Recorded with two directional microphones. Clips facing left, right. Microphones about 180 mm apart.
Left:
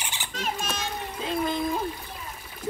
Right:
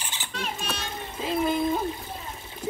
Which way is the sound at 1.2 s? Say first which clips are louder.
Right 3 dB; 5° right (ahead or behind).